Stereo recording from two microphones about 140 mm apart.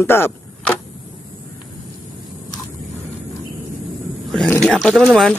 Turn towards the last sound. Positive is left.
turn(degrees=5)  # may be behind; listen again after turning